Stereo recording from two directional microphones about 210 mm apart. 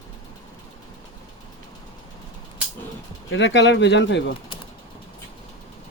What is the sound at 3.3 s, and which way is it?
Speech, 60° left (ahead or behind).